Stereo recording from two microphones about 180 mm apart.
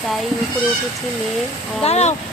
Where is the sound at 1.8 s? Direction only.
35° left (ahead or behind).